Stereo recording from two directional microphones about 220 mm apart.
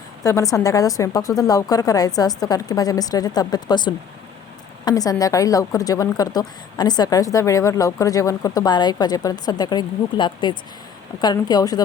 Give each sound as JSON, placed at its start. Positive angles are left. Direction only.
{"t": 0.2, "sound": "a woman's voice", "side_deg": 15}